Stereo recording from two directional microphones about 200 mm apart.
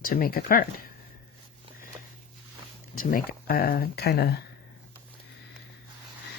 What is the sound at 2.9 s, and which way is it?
Speech, 45° left (ahead or behind).